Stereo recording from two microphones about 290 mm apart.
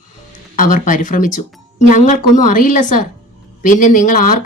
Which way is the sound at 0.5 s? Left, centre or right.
Left.